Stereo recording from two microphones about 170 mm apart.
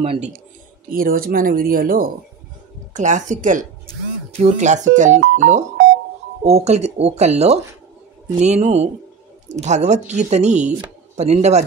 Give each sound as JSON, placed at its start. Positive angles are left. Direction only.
{"t": 0.0, "sound": "speech", "side_deg": -35}
{"t": 0.8, "sound": "speech", "side_deg": -60}
{"t": 2.9, "sound": "speech", "side_deg": -45}